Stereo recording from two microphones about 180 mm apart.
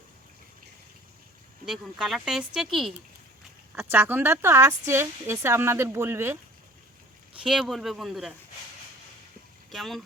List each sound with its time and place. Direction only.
1.6 s speech: 5° right (ahead or behind)
3.8 s speech: 10° right (ahead or behind)
7.4 s speech: centre (ahead or behind)
9.6 s speech: centre (ahead or behind)